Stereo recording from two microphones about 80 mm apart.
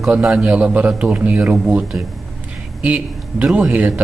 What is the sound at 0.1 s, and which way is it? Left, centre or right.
A man's voice, centre.